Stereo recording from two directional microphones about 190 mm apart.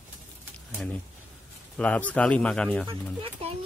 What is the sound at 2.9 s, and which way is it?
Speech, 30° right (ahead or behind).